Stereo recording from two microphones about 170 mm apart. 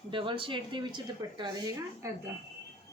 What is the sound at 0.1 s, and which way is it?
Speech, 30° right (ahead or behind).